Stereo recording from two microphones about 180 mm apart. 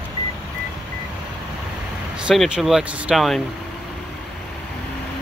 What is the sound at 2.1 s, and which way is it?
Speech, 5° right (ahead or behind).